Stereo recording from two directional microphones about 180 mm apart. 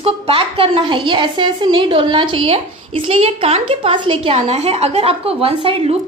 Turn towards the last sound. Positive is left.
turn(degrees=-35)  # may be behind; listen again after turning